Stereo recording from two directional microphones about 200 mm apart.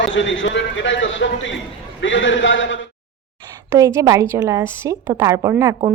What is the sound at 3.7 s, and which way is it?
A woman's voice, 15° right (ahead or behind).